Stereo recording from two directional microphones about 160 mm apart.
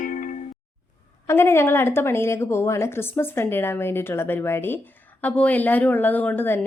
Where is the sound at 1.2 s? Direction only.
15° left (ahead or behind).